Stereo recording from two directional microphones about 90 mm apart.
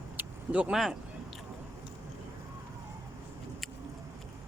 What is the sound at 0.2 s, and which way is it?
Vehicle, 15° right (ahead or behind).